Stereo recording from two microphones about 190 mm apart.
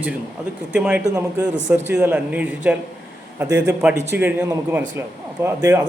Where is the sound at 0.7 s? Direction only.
10° right (ahead or behind).